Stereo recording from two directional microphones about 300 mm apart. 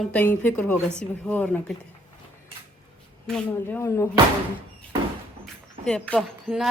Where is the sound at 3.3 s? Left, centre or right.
Centre.